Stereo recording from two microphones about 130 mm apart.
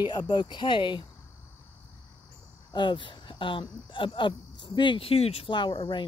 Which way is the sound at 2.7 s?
40° left (ahead or behind).